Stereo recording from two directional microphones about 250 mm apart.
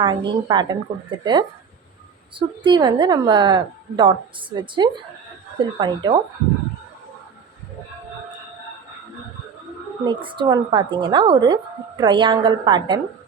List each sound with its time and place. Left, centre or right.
0.0 s a woman's voice: centre
10.1 s a woman's voice: centre